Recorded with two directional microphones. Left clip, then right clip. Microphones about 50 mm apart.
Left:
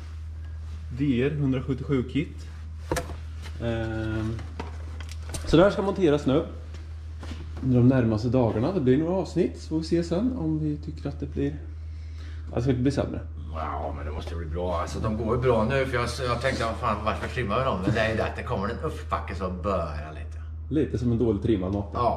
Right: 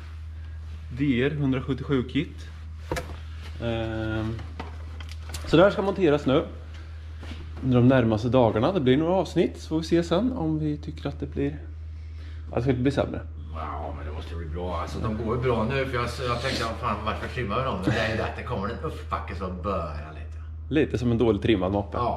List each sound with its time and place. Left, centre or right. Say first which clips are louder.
0.9 s speech: right 1 dB; centre
1.2 s speech: right 1 dB; centre
2.9 s a sound: left 2 dB; centre
3.5 s speech: right 1 dB; centre
3.8 s a sound: right 1 dB; centre
5.4 s a sound: right 1 dB; centre
5.7 s speech: right 1 dB; centre
5.9 s speech: right 1 dB; right
7.2 s a sound: left 1 dB; centre
7.9 s speech: right 3 dB; right
13.5 s a man's voice: left 3 dB; centre
20.7 s speech: right 2 dB; right